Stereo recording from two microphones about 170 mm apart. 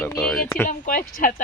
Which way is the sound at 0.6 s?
50° left (ahead or behind).